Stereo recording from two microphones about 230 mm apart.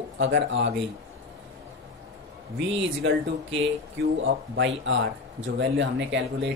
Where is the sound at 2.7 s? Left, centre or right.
Right.